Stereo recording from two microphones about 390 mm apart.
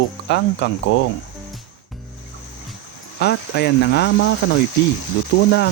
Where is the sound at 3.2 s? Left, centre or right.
Left.